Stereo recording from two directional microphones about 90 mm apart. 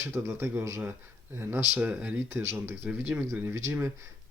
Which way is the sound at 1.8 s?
15° right (ahead or behind).